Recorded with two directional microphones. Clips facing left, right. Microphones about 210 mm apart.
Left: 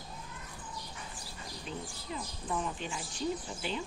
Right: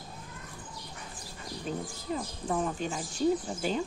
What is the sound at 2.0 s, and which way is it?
Speech, 45° right (ahead or behind).